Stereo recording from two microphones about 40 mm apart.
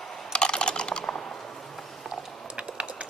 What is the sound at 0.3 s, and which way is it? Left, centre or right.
Computer keyboard, left.